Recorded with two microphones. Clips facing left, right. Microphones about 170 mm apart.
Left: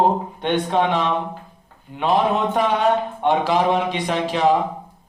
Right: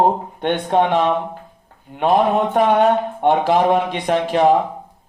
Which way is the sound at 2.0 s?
50° right (ahead or behind).